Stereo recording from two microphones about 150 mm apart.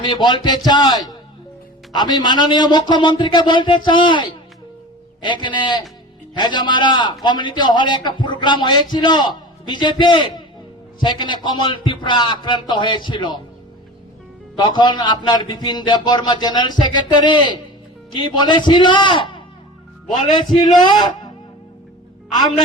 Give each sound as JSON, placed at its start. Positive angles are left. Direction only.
{"t": 0.1, "sound": "a man's voice", "side_deg": 30}
{"t": 14.5, "sound": "a man's voice", "side_deg": 30}